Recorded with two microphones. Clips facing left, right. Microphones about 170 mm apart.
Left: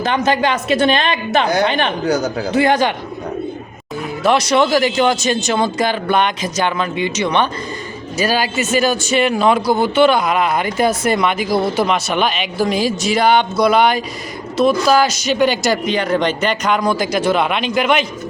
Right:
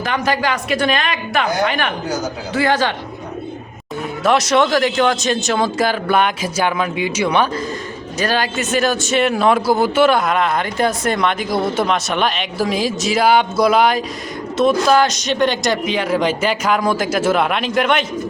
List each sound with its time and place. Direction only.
0.0 s a woman's voice: 25° left (ahead or behind)
4.2 s a man's voice: centre (ahead or behind)
8.2 s a man's voice: 5° left (ahead or behind)